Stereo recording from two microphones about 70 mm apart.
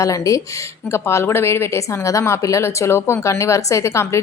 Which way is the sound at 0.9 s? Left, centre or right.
Left.